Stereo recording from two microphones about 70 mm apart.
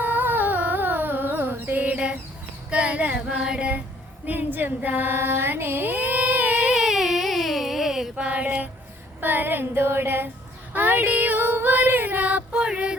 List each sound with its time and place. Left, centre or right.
0.0 s a sound: right
2.6 s speech: centre
3.2 s female singing: centre
4.3 s female singing: right
6.7 s a sound: centre
8.1 s music: centre
9.2 s female singing: right